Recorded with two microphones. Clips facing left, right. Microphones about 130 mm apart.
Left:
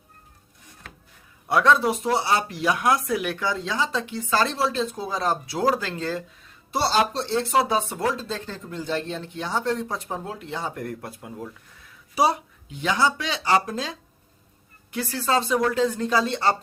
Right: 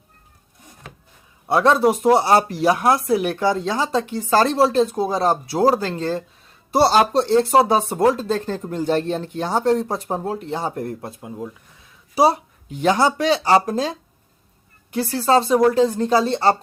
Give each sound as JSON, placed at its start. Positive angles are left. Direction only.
{"t": 1.5, "sound": "speech", "side_deg": -30}
{"t": 12.1, "sound": "speech", "side_deg": -35}
{"t": 14.9, "sound": "speech", "side_deg": -35}